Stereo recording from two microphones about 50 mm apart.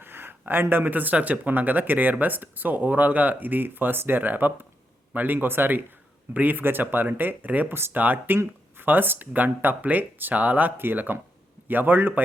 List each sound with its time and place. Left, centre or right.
0.0 s speech: right
10.8 s speech: right